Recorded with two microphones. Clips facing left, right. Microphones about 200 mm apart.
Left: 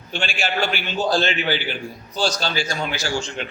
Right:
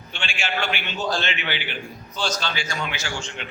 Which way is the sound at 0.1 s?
40° left (ahead or behind).